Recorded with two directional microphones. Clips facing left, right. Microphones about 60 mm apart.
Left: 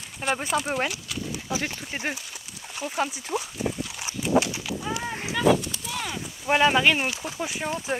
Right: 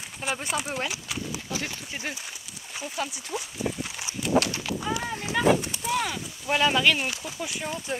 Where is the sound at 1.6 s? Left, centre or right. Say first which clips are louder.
Left 3 dB; left.